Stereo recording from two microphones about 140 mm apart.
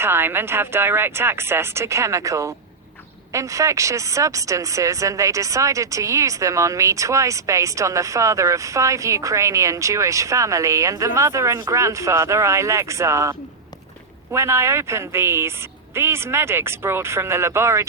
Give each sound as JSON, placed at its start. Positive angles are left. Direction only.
{"t": 0.0, "sound": "a woman's voice", "side_deg": -15}